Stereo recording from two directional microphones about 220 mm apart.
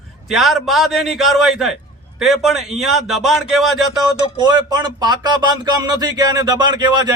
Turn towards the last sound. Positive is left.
turn(degrees=-20)  # may be behind; listen again after turning